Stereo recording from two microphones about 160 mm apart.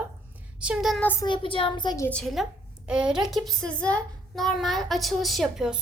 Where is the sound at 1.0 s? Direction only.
15° left (ahead or behind).